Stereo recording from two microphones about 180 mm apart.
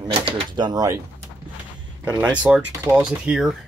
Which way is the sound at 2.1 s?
5° right (ahead or behind).